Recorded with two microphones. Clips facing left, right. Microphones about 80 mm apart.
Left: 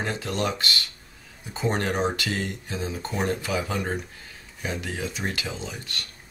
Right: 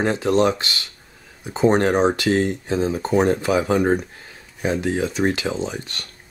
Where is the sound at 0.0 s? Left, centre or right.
Right.